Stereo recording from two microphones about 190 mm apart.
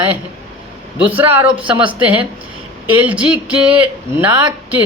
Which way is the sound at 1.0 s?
10° right (ahead or behind).